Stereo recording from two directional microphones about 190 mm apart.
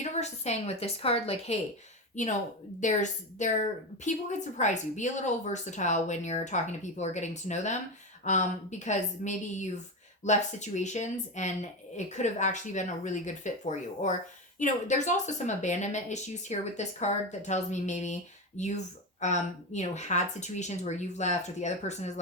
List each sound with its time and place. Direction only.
0.0 s speech: 35° left (ahead or behind)